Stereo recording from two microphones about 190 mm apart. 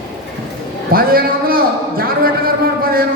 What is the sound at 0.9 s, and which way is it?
A man's voice, 50° right (ahead or behind).